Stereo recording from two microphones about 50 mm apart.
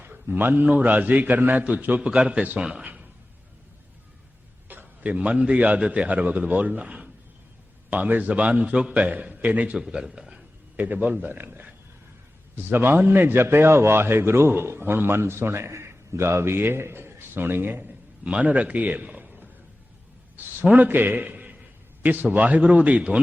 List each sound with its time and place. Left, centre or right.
0.0 s a man's voice: right
2.0 s a man's voice: centre
2.8 s a sound: right
4.7 s a sound: right
5.0 s a man's voice: right
9.7 s a man's voice: centre
10.8 s a man's voice: right
20.4 s a sound: right
20.7 s a man's voice: right